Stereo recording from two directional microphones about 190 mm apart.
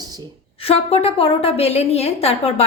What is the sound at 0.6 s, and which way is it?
A woman's voice, 30° left (ahead or behind).